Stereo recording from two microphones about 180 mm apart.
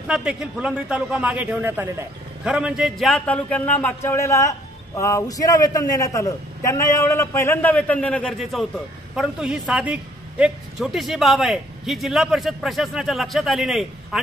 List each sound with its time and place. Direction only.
0.1 s a man's voice: 5° right (ahead or behind)